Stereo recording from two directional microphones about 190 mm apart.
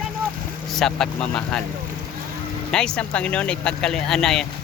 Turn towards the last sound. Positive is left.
turn(degrees=0)  # may be behind; listen again after turning